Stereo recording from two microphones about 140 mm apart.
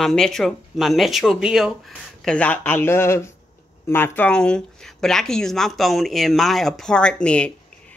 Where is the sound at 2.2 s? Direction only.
5° left (ahead or behind).